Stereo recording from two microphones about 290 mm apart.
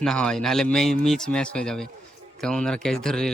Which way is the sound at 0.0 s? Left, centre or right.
Centre.